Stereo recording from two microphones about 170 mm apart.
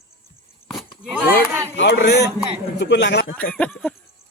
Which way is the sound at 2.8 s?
85° left.